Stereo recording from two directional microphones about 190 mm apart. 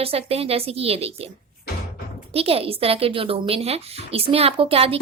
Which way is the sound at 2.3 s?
30° right (ahead or behind).